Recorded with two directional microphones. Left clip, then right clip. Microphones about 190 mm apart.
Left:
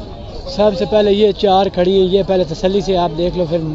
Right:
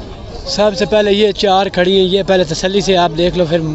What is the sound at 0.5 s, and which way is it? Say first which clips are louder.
Speech: right 1 dB; 5° right (ahead or behind).